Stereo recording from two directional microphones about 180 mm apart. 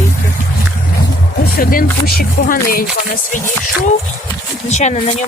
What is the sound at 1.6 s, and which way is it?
Speech, 55° left (ahead or behind).